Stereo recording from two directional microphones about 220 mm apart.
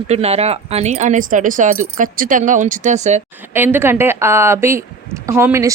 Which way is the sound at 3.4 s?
10° right (ahead or behind).